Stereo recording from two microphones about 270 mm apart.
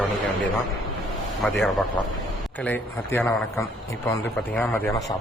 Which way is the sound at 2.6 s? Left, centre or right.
Centre.